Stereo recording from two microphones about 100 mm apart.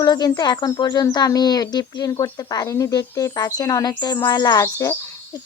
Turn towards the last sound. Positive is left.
turn(degrees=25)  # may be behind; listen again after turning